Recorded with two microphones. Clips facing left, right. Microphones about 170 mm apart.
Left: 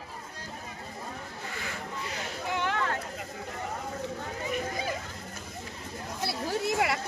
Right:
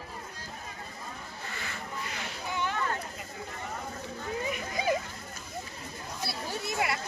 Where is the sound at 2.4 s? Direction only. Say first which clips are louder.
Left 2 dB; 80° left.